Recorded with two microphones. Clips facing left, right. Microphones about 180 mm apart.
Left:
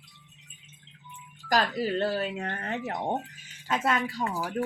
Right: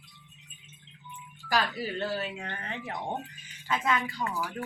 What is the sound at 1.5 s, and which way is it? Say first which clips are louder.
Speech: left 4 dB; 35° left (ahead or behind).